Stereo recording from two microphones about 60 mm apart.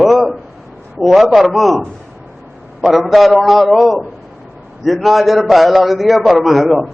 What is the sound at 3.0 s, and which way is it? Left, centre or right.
A man's voice, centre.